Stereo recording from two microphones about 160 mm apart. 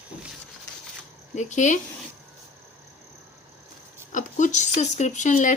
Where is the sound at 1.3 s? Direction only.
50° left (ahead or behind).